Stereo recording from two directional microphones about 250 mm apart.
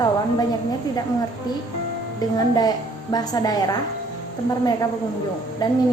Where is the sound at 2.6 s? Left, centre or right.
Centre.